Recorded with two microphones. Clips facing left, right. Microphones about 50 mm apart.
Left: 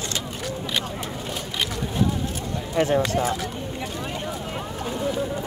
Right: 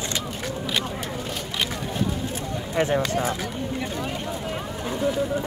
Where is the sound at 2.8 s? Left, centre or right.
Right.